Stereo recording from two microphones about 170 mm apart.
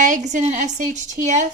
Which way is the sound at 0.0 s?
45° right (ahead or behind).